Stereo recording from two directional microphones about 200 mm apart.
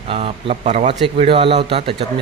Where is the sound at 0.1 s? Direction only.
30° right (ahead or behind).